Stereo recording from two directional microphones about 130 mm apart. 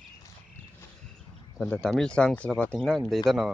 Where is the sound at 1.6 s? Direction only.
5° left (ahead or behind).